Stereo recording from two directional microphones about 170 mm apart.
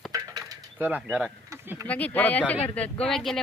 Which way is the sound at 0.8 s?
10° right (ahead or behind).